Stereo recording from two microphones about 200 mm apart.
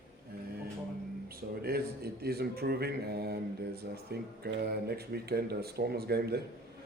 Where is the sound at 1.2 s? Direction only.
50° right (ahead or behind).